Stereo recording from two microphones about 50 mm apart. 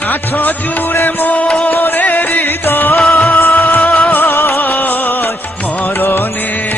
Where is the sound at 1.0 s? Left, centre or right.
Left.